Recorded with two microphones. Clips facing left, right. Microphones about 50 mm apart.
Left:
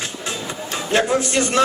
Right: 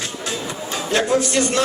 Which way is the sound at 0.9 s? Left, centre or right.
Left.